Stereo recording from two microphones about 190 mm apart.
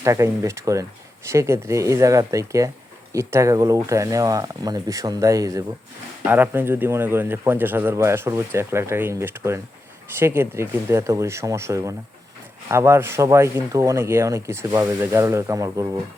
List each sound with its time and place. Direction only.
0.0 s speech: 15° right (ahead or behind)